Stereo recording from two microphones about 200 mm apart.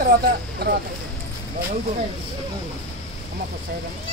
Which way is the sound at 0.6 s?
50° right (ahead or behind).